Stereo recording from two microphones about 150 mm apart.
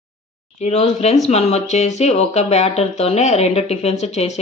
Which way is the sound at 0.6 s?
45° left (ahead or behind).